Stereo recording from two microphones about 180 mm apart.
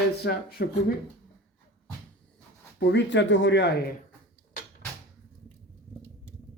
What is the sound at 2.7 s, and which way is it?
Speech, 75° left (ahead or behind).